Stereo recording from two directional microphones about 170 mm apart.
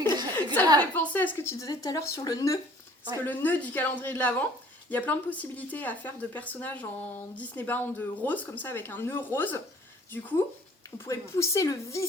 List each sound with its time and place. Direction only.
0.0 s chuckle: 25° right (ahead or behind)
0.8 s speech: 10° left (ahead or behind)